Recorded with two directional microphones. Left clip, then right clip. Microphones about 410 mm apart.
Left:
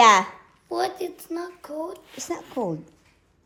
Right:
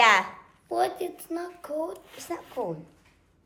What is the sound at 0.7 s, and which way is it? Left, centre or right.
A child's voice, centre.